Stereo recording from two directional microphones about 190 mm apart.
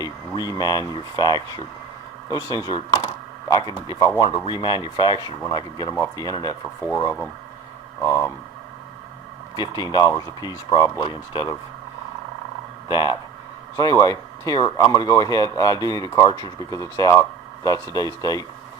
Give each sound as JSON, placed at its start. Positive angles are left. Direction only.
{"t": 0.0, "sound": "speech", "side_deg": 20}
{"t": 8.0, "sound": "speech", "side_deg": 15}
{"t": 9.7, "sound": "speech", "side_deg": 20}
{"t": 12.9, "sound": "speech", "side_deg": 25}